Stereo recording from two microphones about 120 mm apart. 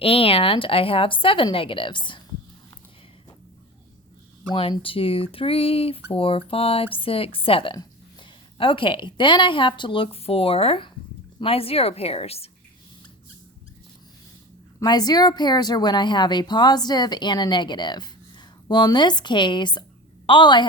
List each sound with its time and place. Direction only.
0.0 s a woman's voice: 50° left (ahead or behind)
4.5 s a woman's voice: 45° left (ahead or behind)
14.8 s a woman's voice: 35° left (ahead or behind)